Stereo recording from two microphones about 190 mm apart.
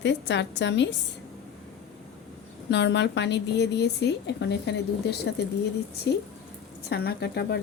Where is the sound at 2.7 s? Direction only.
65° left (ahead or behind).